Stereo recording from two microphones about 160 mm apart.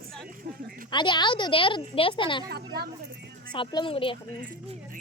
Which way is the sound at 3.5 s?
30° left (ahead or behind).